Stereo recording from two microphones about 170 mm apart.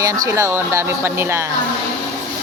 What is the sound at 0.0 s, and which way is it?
Speech, 20° right (ahead or behind).